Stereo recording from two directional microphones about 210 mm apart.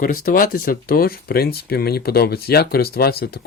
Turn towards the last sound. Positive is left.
turn(degrees=45)  # may be behind; listen again after turning